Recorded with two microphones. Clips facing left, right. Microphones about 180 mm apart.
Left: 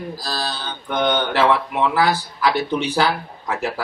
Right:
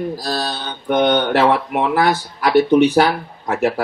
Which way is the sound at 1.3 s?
50° right (ahead or behind).